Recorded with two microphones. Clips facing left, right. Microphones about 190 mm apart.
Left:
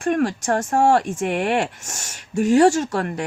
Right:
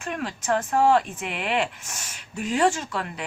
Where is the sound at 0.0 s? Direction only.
50° left (ahead or behind).